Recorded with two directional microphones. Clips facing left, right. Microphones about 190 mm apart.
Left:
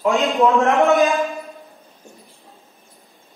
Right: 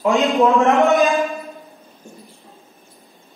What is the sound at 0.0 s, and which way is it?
A man's voice, centre (ahead or behind).